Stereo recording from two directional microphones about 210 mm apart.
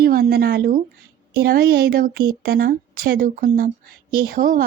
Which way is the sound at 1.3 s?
45° right (ahead or behind).